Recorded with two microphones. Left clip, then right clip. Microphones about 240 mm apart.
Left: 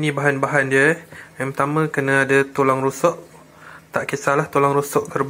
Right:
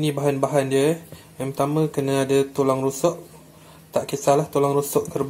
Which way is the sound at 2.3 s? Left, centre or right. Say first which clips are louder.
Left 3 dB; left.